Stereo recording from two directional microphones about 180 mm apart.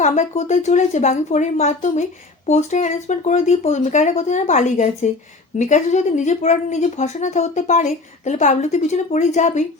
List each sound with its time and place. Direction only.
0.0 s speech: 40° left (ahead or behind)